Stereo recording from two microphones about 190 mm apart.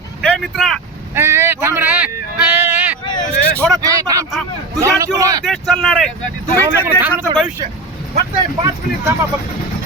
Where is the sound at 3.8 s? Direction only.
15° right (ahead or behind).